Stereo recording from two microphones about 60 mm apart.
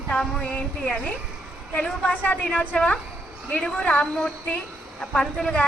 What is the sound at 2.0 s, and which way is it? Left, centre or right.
A woman's voice, left.